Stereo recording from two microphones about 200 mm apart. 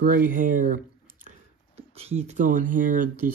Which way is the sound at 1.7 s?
30° right (ahead or behind).